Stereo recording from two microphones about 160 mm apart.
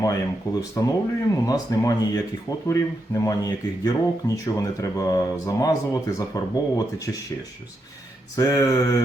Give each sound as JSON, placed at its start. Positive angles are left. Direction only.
{"t": 0.0, "sound": "speech", "side_deg": 20}
{"t": 8.4, "sound": "speech", "side_deg": 20}